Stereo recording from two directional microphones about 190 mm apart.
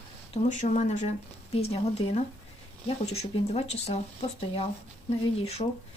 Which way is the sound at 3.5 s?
35° left (ahead or behind).